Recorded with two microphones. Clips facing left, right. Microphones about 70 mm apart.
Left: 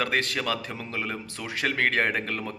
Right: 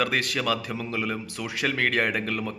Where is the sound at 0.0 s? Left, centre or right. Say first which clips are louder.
Right 1 dB; left.